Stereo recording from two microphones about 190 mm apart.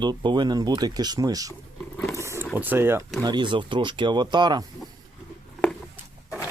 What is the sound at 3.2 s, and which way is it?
Speech, 25° right (ahead or behind).